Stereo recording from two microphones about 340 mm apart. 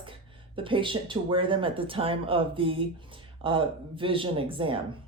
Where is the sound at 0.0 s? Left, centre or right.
Centre.